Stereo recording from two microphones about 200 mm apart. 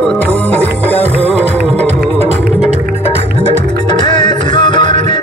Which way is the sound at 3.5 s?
20° left (ahead or behind).